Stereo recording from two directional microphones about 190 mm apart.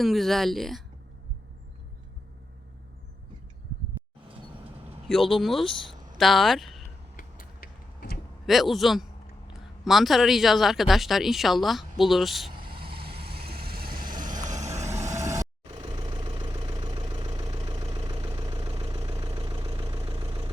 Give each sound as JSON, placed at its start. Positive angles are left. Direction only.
{"t": 0.0, "sound": "speech", "side_deg": 0}
{"t": 5.0, "sound": "speech", "side_deg": 0}
{"t": 7.2, "sound": "a sound", "side_deg": 50}
{"t": 8.4, "sound": "speech", "side_deg": 0}
{"t": 12.7, "sound": "vehicle", "side_deg": -30}
{"t": 13.1, "sound": "vehicle", "side_deg": -55}
{"t": 14.8, "sound": "vehicle", "side_deg": -15}
{"t": 15.7, "sound": "vehicle", "side_deg": -30}
{"t": 18.6, "sound": "vehicle", "side_deg": -30}